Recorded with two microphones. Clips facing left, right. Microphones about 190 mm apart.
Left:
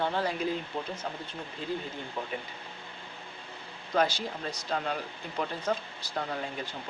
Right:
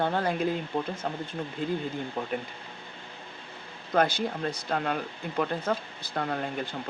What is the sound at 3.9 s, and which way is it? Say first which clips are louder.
Speech: right 3 dB; 55° right (ahead or behind).